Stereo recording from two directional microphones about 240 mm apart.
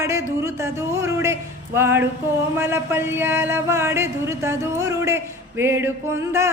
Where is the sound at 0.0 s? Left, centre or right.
Centre.